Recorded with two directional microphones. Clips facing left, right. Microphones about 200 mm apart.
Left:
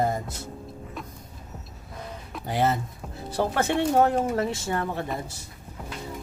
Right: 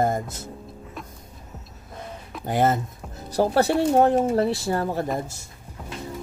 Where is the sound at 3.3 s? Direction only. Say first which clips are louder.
Right 5 dB; 35° right (ahead or behind).